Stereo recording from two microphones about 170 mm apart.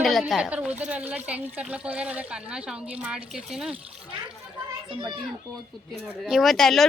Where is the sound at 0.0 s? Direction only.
Centre (ahead or behind).